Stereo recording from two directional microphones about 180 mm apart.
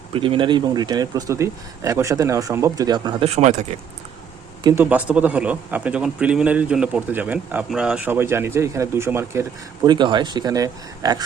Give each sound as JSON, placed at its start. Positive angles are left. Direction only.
{"t": 0.1, "sound": "speech", "side_deg": -30}
{"t": 4.6, "sound": "a man's voice", "side_deg": -10}